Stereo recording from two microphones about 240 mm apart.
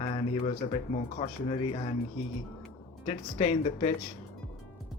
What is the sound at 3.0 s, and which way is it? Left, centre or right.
Speech, left.